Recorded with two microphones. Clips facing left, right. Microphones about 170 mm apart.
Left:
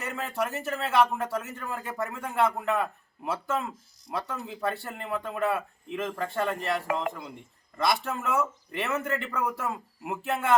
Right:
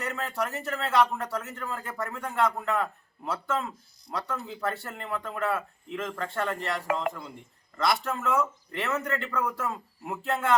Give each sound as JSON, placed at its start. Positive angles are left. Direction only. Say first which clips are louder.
{"t": 0.0, "sound": "speech", "louder": "even", "side_deg": 5}